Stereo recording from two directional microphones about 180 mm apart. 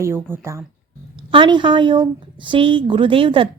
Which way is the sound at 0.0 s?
15° right (ahead or behind).